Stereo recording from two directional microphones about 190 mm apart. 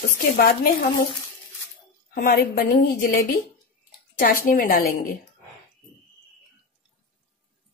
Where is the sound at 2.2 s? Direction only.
50° left (ahead or behind).